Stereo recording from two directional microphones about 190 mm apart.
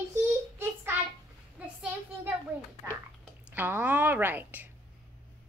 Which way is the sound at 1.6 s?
5° right (ahead or behind).